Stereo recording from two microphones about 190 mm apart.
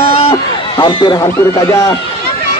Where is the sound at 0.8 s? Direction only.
20° left (ahead or behind).